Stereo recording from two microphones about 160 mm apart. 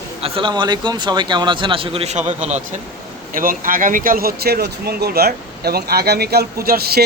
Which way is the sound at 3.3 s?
60° right (ahead or behind).